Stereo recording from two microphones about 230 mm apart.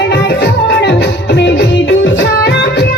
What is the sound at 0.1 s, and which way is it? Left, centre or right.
Music, left.